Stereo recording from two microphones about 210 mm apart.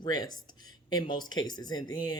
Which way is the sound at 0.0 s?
20° left (ahead or behind).